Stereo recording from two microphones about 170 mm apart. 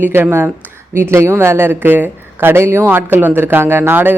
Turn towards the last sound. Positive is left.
turn(degrees=-10)  # may be behind; listen again after turning